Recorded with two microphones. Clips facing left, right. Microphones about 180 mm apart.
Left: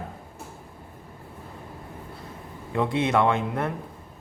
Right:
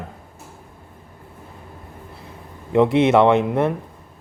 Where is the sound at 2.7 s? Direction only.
20° right (ahead or behind).